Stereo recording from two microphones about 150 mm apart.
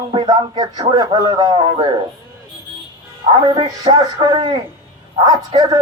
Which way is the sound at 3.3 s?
30° right (ahead or behind).